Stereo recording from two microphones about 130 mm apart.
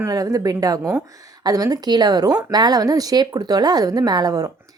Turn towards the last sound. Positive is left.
turn(degrees=-30)  # may be behind; listen again after turning